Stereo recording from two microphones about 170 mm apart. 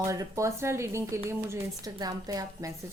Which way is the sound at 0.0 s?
20° right (ahead or behind).